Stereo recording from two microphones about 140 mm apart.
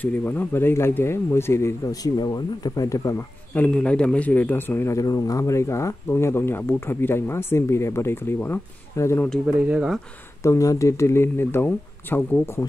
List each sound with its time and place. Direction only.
0.0 s speech: 15° left (ahead or behind)
9.7 s speech: 5° right (ahead or behind)
10.4 s speech: 20° left (ahead or behind)